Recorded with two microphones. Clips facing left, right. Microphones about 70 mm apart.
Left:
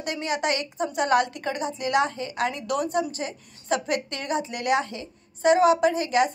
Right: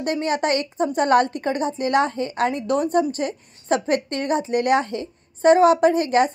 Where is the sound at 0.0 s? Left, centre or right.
Right.